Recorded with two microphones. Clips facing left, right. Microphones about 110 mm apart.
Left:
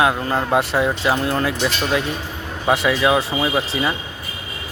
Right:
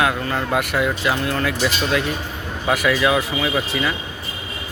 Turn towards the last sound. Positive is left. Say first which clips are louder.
# left 1 dB
turn(degrees=25)  # may be behind; listen again after turning